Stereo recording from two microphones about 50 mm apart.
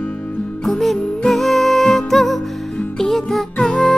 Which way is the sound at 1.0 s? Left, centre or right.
Centre.